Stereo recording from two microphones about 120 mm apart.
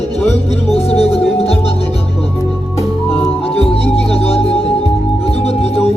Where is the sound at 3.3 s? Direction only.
55° left (ahead or behind).